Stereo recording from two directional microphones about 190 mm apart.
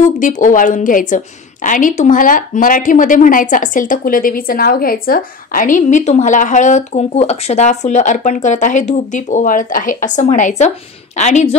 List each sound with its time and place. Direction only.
0.0 s a woman's voice: 40° left (ahead or behind)